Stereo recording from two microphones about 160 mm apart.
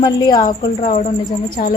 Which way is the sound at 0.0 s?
25° left (ahead or behind).